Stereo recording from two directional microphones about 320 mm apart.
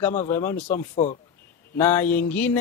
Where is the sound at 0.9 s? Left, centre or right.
Centre.